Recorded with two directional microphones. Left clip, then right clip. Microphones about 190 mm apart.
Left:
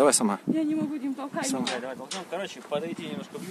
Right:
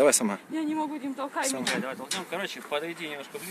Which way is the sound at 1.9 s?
20° right (ahead or behind).